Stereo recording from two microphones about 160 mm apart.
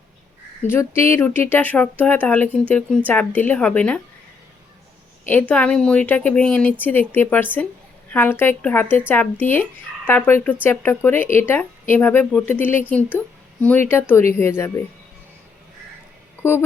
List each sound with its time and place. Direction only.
0.6 s speech: 15° left (ahead or behind)
5.3 s speech: 10° left (ahead or behind)
16.4 s mantra: 15° left (ahead or behind)